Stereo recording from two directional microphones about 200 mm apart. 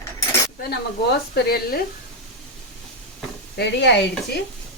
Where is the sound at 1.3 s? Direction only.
50° left (ahead or behind).